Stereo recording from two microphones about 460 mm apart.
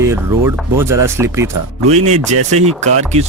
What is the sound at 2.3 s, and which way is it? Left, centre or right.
Speech, right.